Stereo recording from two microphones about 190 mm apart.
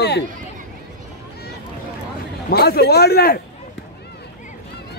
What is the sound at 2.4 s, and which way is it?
Speech, 55° left (ahead or behind).